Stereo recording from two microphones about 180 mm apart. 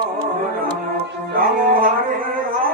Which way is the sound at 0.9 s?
50° right (ahead or behind).